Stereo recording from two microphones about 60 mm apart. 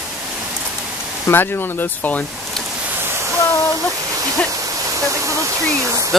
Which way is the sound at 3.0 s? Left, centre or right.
Right.